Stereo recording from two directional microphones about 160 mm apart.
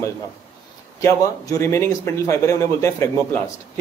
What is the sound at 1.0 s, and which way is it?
A man's voice, 20° left (ahead or behind).